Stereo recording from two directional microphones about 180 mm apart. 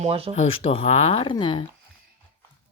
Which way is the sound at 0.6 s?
30° left (ahead or behind).